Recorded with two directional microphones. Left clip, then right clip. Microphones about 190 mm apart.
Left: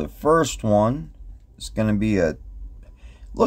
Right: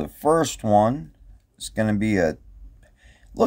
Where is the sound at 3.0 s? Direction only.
5° right (ahead or behind).